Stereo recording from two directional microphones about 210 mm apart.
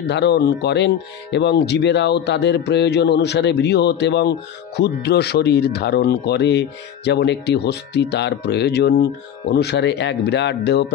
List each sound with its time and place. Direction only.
0.1 s speech: 50° left (ahead or behind)